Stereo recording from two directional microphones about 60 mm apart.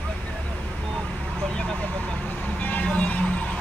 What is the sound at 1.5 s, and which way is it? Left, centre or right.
Vehicle, centre.